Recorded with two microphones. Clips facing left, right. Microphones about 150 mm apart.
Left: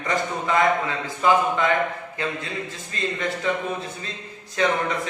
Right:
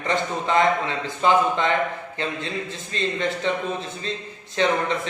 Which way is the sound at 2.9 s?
25° right (ahead or behind).